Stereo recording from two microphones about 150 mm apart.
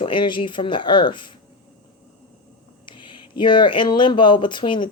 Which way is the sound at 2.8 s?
30° left (ahead or behind).